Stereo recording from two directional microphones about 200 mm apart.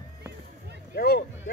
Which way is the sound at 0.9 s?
50° left (ahead or behind).